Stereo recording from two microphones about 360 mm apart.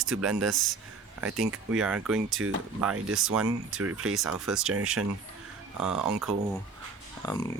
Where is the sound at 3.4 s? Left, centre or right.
Centre.